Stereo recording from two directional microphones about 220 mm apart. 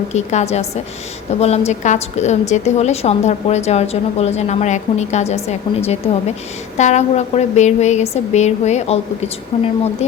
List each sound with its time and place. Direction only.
0.1 s a woman's voice: 30° left (ahead or behind)